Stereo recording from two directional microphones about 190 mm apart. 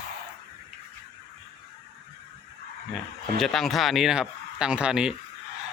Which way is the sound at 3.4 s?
Centre (ahead or behind).